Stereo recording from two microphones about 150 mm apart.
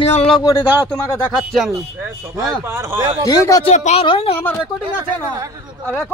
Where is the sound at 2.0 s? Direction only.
15° right (ahead or behind).